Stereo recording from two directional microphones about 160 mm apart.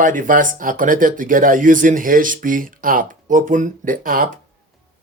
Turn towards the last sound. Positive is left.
turn(degrees=-60)  # may be behind; listen again after turning